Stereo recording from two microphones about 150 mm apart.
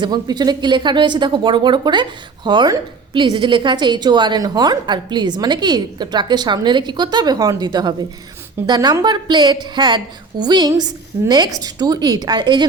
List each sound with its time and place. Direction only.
0.0 s a woman's voice: 30° right (ahead or behind)